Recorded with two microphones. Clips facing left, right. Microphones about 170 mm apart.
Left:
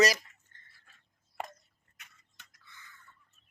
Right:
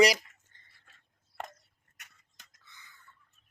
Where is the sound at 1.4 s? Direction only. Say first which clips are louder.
Left 2 dB; 10° left (ahead or behind).